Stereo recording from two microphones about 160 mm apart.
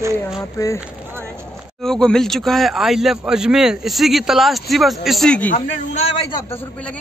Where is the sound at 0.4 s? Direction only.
20° left (ahead or behind).